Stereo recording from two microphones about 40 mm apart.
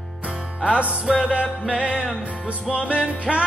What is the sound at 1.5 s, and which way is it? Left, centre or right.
Music, right.